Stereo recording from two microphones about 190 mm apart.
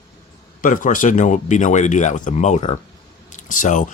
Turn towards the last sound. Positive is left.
turn(degrees=40)  # may be behind; listen again after turning